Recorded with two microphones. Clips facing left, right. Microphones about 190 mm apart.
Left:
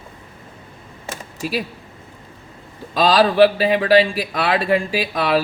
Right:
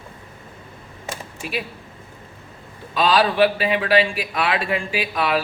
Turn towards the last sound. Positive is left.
turn(degrees=35)  # may be behind; listen again after turning